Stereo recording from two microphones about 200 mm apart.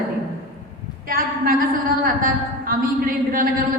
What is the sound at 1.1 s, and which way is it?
Speech, 45° right (ahead or behind).